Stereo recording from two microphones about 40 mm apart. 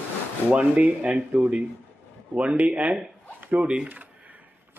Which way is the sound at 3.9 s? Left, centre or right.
Right.